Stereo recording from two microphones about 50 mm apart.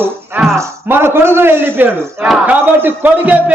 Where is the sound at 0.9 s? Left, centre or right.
Right.